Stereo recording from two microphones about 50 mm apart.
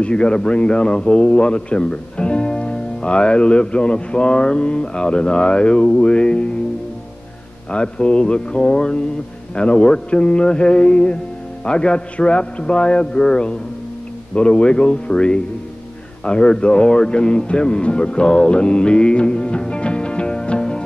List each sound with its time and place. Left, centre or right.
0.0 s a man's voice: centre
7.7 s a man's voice: centre